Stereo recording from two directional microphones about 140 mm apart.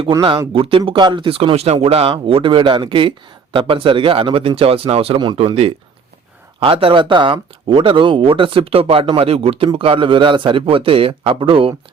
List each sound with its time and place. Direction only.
0.1 s speech: 30° right (ahead or behind)